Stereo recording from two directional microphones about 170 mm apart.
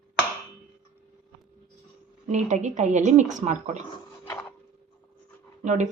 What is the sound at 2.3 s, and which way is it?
A woman's voice, 45° right (ahead or behind).